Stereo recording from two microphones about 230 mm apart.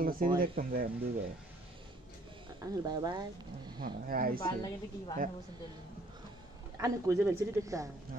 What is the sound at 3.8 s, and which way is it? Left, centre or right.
Speech, right.